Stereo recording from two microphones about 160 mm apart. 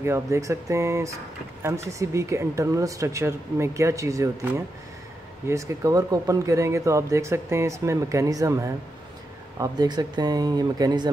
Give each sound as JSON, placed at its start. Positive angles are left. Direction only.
{"t": 0.0, "sound": "speech", "side_deg": -15}